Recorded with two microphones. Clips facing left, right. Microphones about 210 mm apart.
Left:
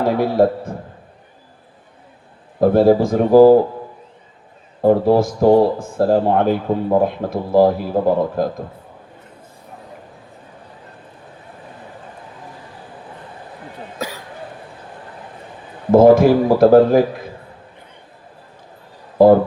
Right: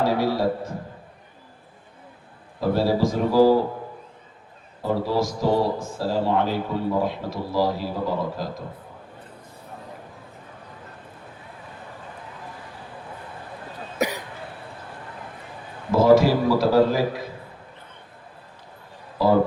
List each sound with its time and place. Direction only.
0.2 s speech: 55° left (ahead or behind)
2.6 s speech: 50° left (ahead or behind)
4.8 s speech: 55° left (ahead or behind)
14.0 s cough: 20° right (ahead or behind)
15.9 s speech: 55° left (ahead or behind)
19.2 s speech: 50° left (ahead or behind)